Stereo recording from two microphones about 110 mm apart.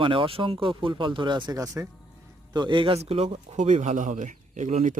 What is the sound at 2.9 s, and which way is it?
Speech, 70° right (ahead or behind).